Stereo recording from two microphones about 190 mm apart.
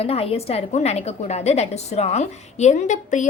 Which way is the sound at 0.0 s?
30° left (ahead or behind).